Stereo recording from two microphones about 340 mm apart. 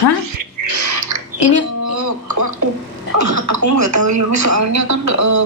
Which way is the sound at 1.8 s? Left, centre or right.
Right.